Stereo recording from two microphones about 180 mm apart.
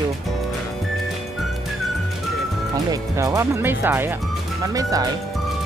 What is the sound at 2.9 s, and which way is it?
Speech, 20° right (ahead or behind).